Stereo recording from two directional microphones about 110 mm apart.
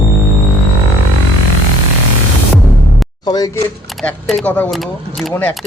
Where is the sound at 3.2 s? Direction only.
35° left (ahead or behind).